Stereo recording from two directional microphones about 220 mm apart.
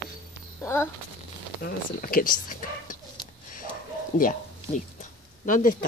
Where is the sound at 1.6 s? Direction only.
40° left (ahead or behind).